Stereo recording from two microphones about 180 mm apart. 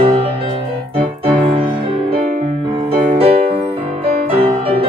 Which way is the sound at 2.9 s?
30° right (ahead or behind).